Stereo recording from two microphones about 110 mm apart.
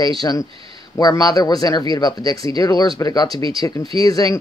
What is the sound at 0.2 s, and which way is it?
Speech, 35° left (ahead or behind).